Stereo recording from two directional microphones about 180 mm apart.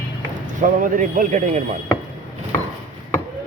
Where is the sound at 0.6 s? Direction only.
50° right (ahead or behind).